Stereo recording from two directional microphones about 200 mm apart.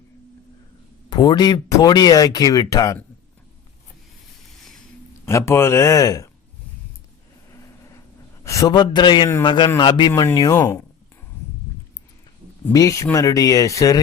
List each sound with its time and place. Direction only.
1.1 s speech: 20° left (ahead or behind)
5.2 s speech: 15° left (ahead or behind)
7.5 s vehicle: 15° left (ahead or behind)
8.4 s speech: 20° left (ahead or behind)
10.1 s speech: 10° left (ahead or behind)
12.6 s speech: 15° left (ahead or behind)